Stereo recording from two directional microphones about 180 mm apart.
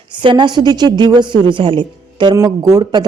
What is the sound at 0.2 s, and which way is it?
A woman's voice, 25° right (ahead or behind).